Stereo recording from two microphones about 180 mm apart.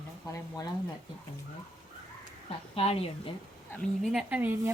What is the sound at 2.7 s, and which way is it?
Speech, 35° left (ahead or behind).